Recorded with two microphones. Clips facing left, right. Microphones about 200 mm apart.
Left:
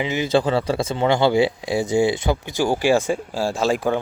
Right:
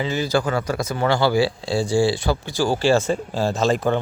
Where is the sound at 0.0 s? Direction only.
20° left (ahead or behind).